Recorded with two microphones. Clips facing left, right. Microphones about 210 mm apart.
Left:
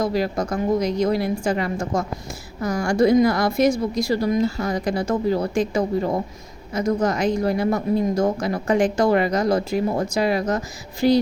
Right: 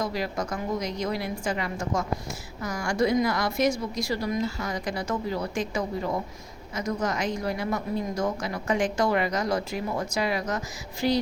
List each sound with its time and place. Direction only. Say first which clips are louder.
0.0 s a woman's voice: left 7 dB; 35° left (ahead or behind)